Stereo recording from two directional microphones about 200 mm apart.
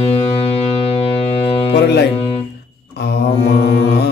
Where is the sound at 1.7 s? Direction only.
55° left (ahead or behind).